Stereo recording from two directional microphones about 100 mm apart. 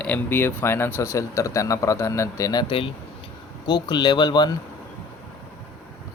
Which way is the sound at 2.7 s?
60° left (ahead or behind).